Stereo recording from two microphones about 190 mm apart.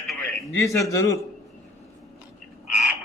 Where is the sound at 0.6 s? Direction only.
15° left (ahead or behind).